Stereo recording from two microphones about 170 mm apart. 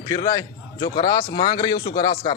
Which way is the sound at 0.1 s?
25° left (ahead or behind).